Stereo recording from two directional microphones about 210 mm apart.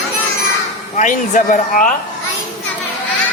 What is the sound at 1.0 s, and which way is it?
Speech, 35° left (ahead or behind).